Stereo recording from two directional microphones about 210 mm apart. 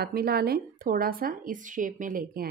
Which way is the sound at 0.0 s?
45° right (ahead or behind).